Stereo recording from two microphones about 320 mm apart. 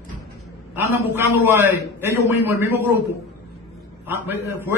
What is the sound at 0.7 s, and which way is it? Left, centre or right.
A man's voice, centre.